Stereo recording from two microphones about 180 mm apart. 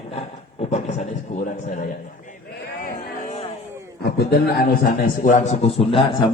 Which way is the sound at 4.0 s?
65° left (ahead or behind).